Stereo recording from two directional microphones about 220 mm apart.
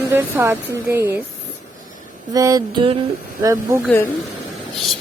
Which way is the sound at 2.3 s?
15° right (ahead or behind).